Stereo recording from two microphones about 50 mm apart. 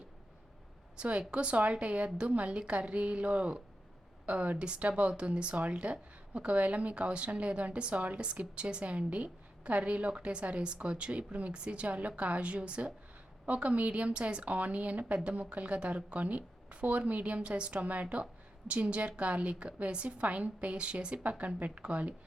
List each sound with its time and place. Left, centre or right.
0.9 s a woman's voice: right